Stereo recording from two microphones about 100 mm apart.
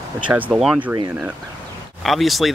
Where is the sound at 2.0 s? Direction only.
Centre (ahead or behind).